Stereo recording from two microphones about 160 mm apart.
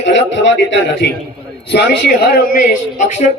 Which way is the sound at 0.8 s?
90° left.